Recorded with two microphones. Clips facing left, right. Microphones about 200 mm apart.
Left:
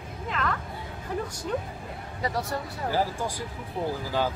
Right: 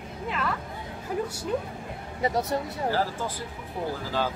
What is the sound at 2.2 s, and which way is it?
Speech, 20° right (ahead or behind).